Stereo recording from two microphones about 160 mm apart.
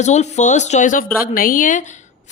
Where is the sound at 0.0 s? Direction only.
45° left (ahead or behind).